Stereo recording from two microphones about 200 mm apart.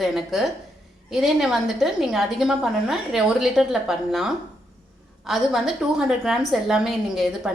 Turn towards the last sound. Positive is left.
turn(degrees=0)  # may be behind; listen again after turning